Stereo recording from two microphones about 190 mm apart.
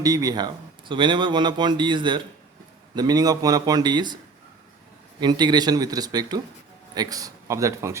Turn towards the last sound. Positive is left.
turn(degrees=-15)  # may be behind; listen again after turning